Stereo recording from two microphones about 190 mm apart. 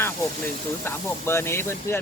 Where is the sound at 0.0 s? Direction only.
10° left (ahead or behind).